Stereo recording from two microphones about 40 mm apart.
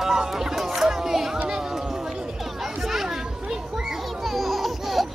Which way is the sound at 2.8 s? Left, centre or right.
Centre.